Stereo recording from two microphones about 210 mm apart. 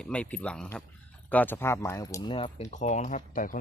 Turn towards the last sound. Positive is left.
turn(degrees=40)  # may be behind; listen again after turning